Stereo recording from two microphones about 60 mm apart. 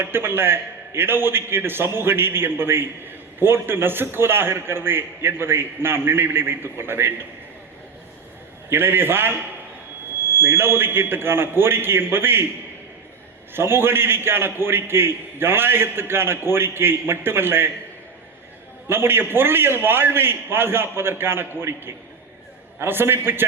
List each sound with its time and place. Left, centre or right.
0.0 s a man's voice: right
8.7 s a man's voice: right
10.4 s a man's voice: right
13.5 s a man's voice: right
18.9 s a man's voice: right